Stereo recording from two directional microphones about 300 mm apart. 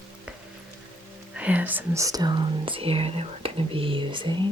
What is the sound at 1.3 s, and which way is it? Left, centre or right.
Speech, centre.